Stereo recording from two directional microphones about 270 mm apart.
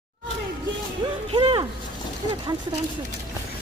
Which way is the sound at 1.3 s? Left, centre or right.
Centre.